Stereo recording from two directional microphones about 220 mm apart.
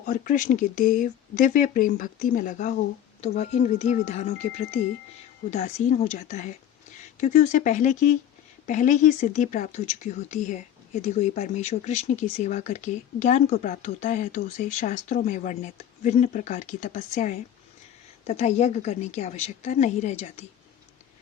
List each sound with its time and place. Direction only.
0.0 s a woman's voice: 35° left (ahead or behind)